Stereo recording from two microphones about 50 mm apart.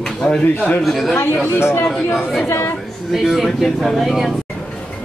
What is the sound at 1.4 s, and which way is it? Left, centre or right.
Speech, left.